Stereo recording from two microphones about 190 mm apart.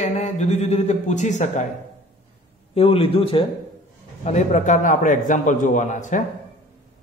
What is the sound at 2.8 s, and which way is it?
A man's voice, 30° left (ahead or behind).